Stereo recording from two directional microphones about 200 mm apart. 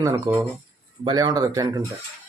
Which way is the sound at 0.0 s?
15° right (ahead or behind).